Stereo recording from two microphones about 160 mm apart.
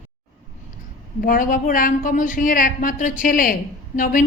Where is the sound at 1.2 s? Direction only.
60° left (ahead or behind).